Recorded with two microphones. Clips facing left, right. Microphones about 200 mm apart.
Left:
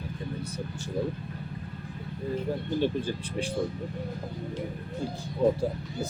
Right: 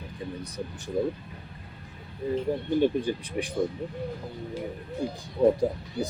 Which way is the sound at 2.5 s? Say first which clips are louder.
Right 4 dB; 20° right (ahead or behind).